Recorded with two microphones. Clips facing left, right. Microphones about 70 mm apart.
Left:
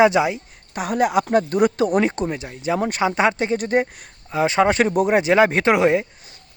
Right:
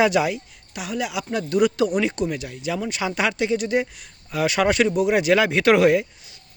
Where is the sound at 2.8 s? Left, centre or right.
Left.